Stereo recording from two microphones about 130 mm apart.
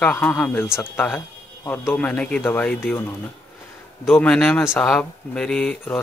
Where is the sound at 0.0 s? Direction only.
15° left (ahead or behind).